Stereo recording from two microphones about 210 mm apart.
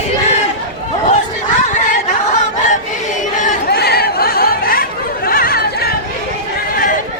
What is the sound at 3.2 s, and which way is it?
Chatter, 35° left (ahead or behind).